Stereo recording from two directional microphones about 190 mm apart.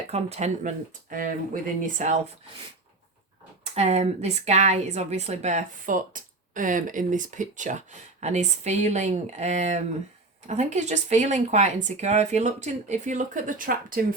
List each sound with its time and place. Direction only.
0.1 s a woman's voice: 35° right (ahead or behind)
3.8 s a woman's voice: 35° right (ahead or behind)